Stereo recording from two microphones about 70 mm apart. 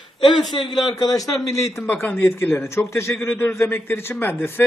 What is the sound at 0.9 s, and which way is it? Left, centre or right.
Speech, left.